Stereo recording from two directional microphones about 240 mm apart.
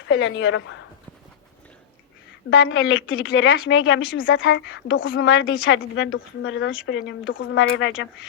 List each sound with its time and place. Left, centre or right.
0.1 s a woman's voice: left
2.5 s a woman's voice: left